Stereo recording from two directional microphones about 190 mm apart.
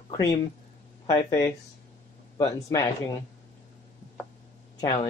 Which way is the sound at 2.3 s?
20° left (ahead or behind).